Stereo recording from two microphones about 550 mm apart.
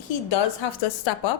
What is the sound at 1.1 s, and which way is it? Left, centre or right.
Speech, left.